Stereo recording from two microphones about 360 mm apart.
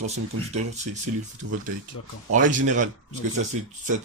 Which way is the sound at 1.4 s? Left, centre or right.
Right.